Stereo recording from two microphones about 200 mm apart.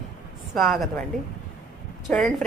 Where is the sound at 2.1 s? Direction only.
5° left (ahead or behind).